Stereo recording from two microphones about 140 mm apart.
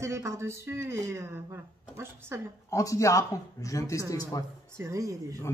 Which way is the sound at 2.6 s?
25° left (ahead or behind).